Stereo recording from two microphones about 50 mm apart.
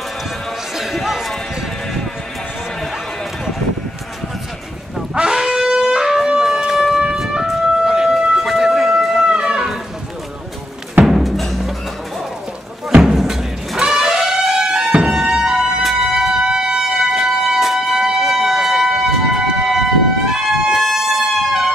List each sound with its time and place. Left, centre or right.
0.7 s a sound: centre
5.1 s shofar: centre
7.0 s siren: centre
8.5 s a sound: centre
9.2 s music: centre
11.1 s music: centre
13.0 s music: centre
15.8 s music: centre
16.3 s a sound: centre
20.2 s trumpet: centre